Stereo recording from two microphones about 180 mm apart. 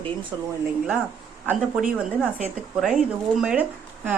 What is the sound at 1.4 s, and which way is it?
A woman's voice, 10° right (ahead or behind).